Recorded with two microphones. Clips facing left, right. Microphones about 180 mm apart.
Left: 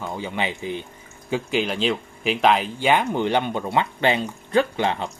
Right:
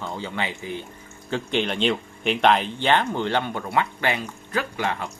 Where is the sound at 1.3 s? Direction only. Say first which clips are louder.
Left 1 dB; 5° left (ahead or behind); by 5.0 s 25° left (ahead or behind).